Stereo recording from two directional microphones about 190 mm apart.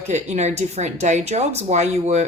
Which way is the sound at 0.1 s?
35° right (ahead or behind).